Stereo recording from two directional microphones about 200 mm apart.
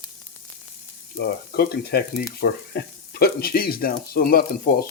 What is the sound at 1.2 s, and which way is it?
Speech, 50° left (ahead or behind).